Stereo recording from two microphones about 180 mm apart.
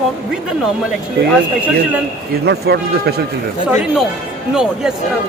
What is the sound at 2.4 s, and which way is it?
Speech, 65° right (ahead or behind).